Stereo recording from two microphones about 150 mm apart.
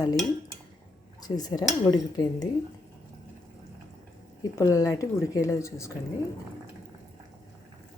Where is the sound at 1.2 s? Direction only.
25° left (ahead or behind).